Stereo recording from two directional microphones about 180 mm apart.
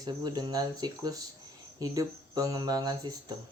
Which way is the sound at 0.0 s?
25° right (ahead or behind).